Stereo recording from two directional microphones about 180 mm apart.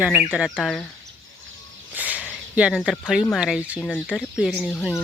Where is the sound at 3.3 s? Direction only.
5° right (ahead or behind).